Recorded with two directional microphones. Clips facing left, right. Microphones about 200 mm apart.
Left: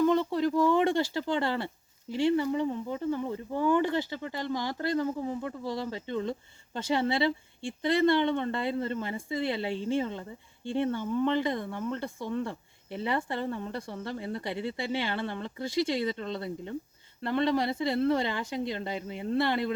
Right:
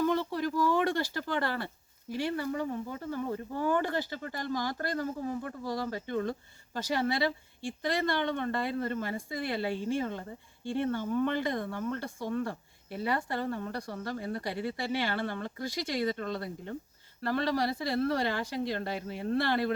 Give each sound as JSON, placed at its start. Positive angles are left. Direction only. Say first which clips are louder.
{"t": 0.0, "sound": "speech", "louder": "left 4 dB", "side_deg": 20}